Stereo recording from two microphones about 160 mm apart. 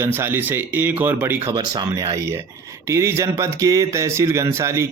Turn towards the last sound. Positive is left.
turn(degrees=-15)  # may be behind; listen again after turning